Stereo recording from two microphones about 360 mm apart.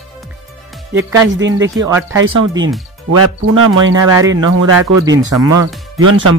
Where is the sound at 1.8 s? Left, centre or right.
Centre.